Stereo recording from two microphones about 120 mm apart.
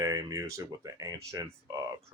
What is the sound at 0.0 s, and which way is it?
Speech, 30° right (ahead or behind).